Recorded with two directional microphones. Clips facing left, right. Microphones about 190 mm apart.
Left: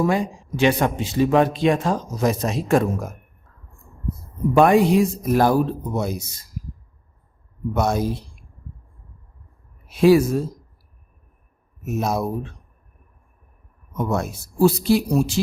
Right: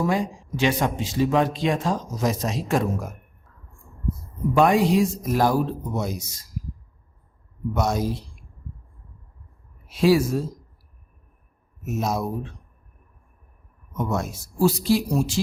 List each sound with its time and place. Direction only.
0.1 s speech: 60° left (ahead or behind)
4.5 s speech: 55° left (ahead or behind)
7.7 s speech: 55° left (ahead or behind)
9.9 s speech: 55° left (ahead or behind)
11.9 s speech: 60° left (ahead or behind)
14.1 s speech: 60° left (ahead or behind)